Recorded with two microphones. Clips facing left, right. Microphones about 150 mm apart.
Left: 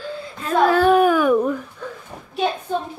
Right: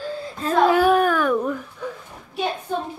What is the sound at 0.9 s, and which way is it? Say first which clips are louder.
Speech: left 3 dB; 5° left (ahead or behind).